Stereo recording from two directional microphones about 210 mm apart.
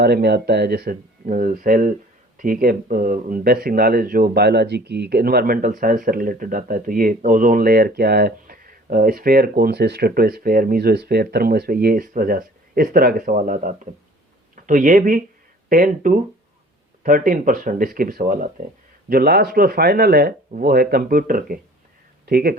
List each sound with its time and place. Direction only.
0.0 s speech: 50° right (ahead or behind)